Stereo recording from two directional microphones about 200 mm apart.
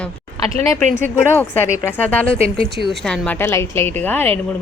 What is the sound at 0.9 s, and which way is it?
A woman's voice, 10° left (ahead or behind).